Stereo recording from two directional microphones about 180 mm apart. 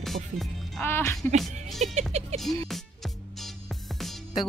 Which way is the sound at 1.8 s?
40° right (ahead or behind).